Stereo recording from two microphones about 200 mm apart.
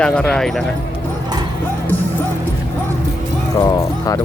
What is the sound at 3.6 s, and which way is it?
Speech, 20° left (ahead or behind).